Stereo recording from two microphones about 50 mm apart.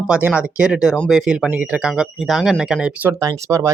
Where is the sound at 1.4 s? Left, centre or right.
Right.